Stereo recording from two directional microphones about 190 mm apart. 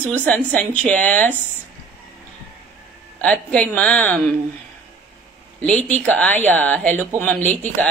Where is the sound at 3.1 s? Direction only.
5° left (ahead or behind).